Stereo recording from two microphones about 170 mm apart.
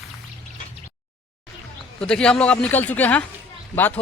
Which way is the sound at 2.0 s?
5° left (ahead or behind).